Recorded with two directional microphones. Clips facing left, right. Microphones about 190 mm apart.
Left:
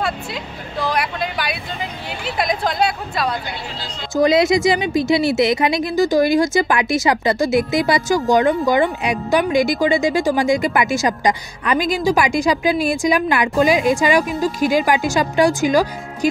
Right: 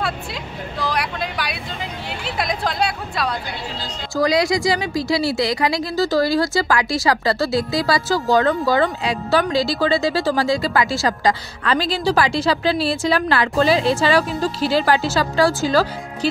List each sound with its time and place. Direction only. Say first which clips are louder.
0.0 s vehicle: left 2 dB; centre (ahead or behind)
2.0 s a sound: left 3 dB; centre (ahead or behind)
4.1 s a woman's voice: left 4 dB; 20° left (ahead or behind)